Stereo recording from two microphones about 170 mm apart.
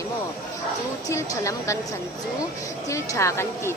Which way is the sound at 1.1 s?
15° left (ahead or behind).